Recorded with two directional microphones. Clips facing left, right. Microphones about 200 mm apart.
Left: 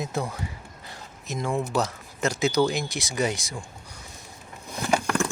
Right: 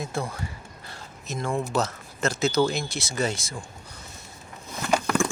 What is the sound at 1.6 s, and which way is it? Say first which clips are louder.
Speech: even; 15° left (ahead or behind).